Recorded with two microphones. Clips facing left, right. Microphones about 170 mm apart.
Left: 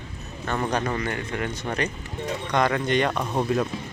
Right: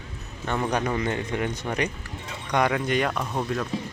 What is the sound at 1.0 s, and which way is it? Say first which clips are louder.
Speech: right 2 dB; 20° right (ahead or behind).